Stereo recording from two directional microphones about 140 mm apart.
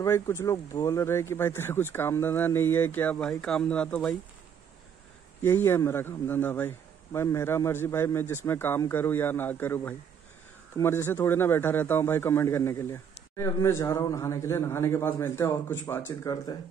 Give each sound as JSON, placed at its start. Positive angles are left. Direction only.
{"t": 0.0, "sound": "speech", "side_deg": 20}
{"t": 5.4, "sound": "speech", "side_deg": 20}